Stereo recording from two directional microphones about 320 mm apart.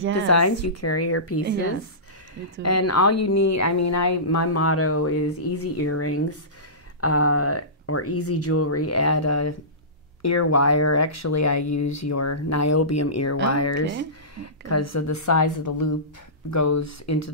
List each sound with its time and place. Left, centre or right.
0.3 s a woman's voice: left
2.6 s a woman's voice: left
16.4 s speech: left